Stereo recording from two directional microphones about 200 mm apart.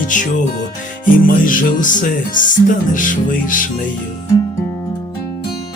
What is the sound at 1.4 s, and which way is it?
Music, 40° left (ahead or behind).